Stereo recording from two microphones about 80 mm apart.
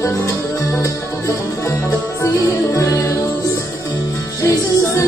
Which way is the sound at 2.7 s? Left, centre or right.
Left.